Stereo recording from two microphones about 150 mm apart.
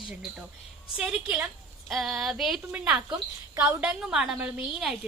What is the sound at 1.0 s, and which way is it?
A woman's voice, 10° right (ahead or behind).